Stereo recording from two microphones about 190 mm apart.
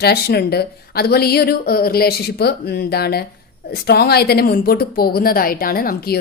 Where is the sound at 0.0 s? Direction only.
55° left (ahead or behind).